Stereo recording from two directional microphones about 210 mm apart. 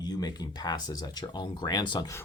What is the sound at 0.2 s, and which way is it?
Speech, 20° left (ahead or behind).